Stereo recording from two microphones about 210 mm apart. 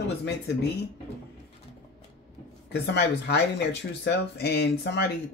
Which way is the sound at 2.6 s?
50° left (ahead or behind).